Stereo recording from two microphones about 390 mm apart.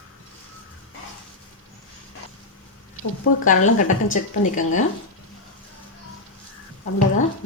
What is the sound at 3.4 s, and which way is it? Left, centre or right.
A woman's voice, centre.